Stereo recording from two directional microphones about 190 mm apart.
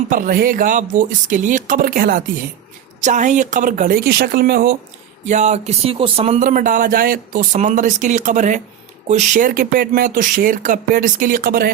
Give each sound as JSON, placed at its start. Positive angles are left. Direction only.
{"t": 0.1, "sound": "speech", "side_deg": -50}
{"t": 5.2, "sound": "speech", "side_deg": -40}
{"t": 6.4, "sound": "speech", "side_deg": -45}